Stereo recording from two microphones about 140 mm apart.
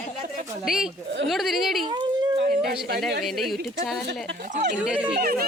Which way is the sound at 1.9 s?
30° right (ahead or behind).